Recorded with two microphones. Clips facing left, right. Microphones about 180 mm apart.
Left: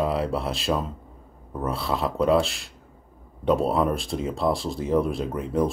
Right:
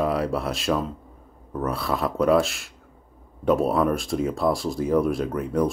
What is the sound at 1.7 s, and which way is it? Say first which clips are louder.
Speech: right 1 dB; 25° left (ahead or behind).